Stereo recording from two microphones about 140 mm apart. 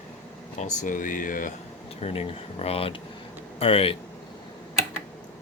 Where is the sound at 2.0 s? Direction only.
45° left (ahead or behind).